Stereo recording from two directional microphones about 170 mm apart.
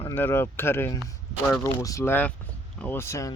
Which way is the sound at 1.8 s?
20° left (ahead or behind).